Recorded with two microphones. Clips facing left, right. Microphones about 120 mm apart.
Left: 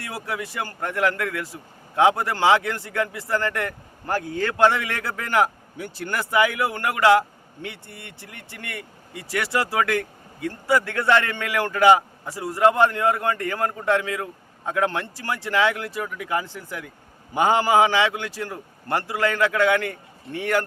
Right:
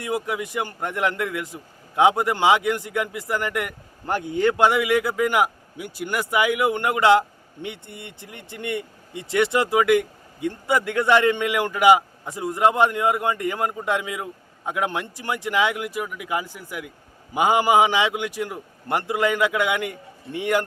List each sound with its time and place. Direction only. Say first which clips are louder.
0.0 s a man's voice: right 5 dB; 20° right (ahead or behind)